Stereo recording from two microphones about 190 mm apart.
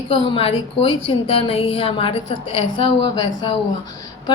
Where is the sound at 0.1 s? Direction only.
30° left (ahead or behind).